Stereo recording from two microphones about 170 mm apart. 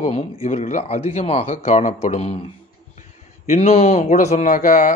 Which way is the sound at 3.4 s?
45° left (ahead or behind).